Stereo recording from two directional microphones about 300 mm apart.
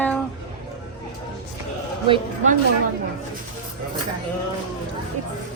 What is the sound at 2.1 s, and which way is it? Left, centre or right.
Speech, right.